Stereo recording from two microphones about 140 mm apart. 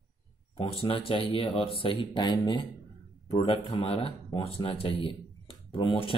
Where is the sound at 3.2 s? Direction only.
45° left (ahead or behind).